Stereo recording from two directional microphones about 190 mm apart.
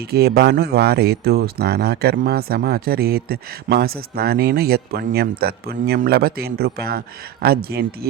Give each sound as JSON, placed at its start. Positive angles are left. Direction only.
{"t": 0.1, "sound": "speech", "side_deg": -55}